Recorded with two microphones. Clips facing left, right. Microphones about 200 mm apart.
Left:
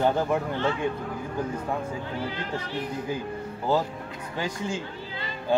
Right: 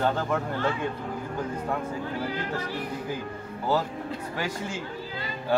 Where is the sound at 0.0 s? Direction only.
15° left (ahead or behind).